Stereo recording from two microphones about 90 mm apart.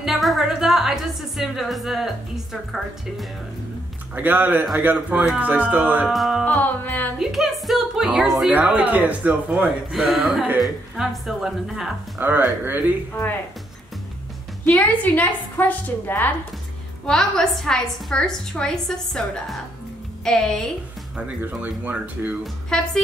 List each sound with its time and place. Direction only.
0.0 s a woman's voice: centre (ahead or behind)
4.1 s a man's voice: 20° right (ahead or behind)
6.0 s a woman's voice: centre (ahead or behind)
6.4 s a woman's voice: 20° left (ahead or behind)
7.2 s a woman's voice: 5° right (ahead or behind)
8.5 s a man's voice: 15° right (ahead or behind)
9.9 s a woman's voice: 5° right (ahead or behind)
12.2 s a man's voice: 20° right (ahead or behind)
15.1 s a woman's voice: 20° left (ahead or behind)
17.0 s a woman's voice: 5° left (ahead or behind)
21.4 s a man's voice: 15° right (ahead or behind)
22.7 s a woman's voice: 5° left (ahead or behind)